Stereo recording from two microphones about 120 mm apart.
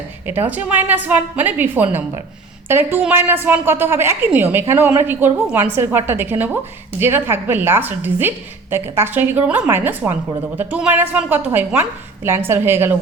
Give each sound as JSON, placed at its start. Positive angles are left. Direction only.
{"t": 0.3, "sound": "a woman's voice", "side_deg": -15}